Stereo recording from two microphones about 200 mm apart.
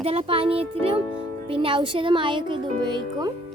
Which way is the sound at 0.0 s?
30° right (ahead or behind).